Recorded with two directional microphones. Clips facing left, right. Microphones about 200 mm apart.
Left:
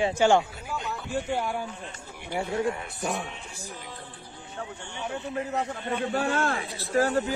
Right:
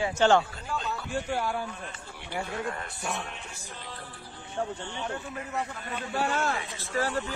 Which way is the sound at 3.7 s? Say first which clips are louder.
Left 2 dB; 15° left (ahead or behind).